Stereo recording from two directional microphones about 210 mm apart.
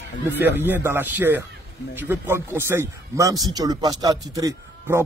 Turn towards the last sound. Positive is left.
turn(degrees=-15)  # may be behind; listen again after turning